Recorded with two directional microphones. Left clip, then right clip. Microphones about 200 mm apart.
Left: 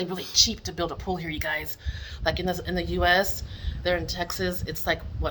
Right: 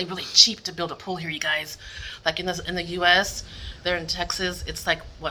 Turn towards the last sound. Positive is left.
turn(degrees=25)  # may be behind; listen again after turning